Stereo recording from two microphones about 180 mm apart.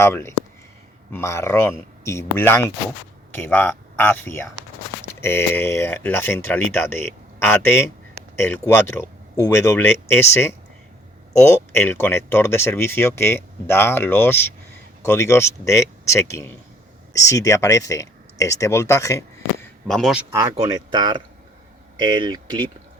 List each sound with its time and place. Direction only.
0.0 s speech: 15° left (ahead or behind)
11.7 s speech: 15° left (ahead or behind)
19.9 s speech: centre (ahead or behind)
20.3 s speech: 20° right (ahead or behind)